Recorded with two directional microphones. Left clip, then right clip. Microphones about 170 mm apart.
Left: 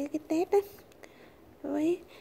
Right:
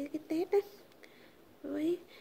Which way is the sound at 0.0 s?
25° left (ahead or behind).